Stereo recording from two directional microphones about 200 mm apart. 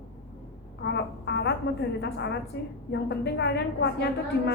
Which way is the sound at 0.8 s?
60° left (ahead or behind).